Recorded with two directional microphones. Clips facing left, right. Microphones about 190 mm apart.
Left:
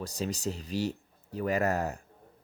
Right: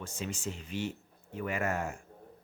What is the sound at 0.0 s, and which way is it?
Speech, 40° left (ahead or behind).